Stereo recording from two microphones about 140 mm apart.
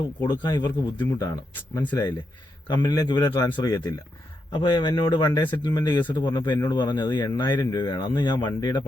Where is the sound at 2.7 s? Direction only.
30° left (ahead or behind).